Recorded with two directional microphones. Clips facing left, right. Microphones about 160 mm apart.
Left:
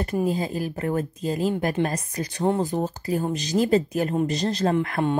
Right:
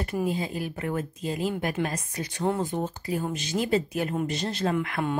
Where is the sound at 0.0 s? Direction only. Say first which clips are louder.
Left 4 dB; 40° left (ahead or behind).